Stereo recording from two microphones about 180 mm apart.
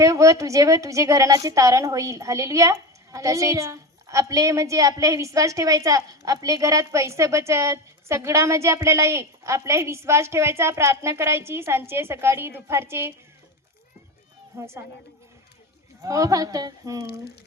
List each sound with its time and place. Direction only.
0.0 s a woman's voice: 15° right (ahead or behind)
14.6 s a woman's voice: 15° right (ahead or behind)
16.0 s speech: 20° right (ahead or behind)